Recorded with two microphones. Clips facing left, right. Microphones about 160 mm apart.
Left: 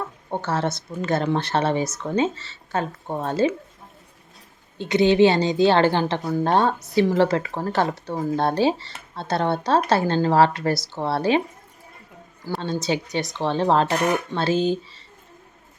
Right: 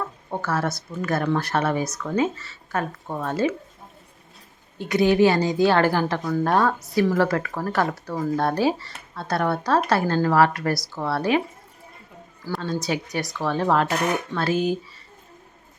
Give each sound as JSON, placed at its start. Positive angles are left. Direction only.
{"t": 0.3, "sound": "a woman's voice", "side_deg": 25}
{"t": 4.8, "sound": "a woman's voice", "side_deg": 25}
{"t": 12.6, "sound": "a woman's voice", "side_deg": 25}